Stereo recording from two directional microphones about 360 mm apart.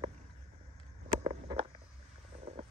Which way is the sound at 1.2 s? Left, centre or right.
Centre.